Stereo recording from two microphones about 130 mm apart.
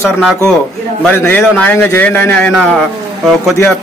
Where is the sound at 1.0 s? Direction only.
15° left (ahead or behind).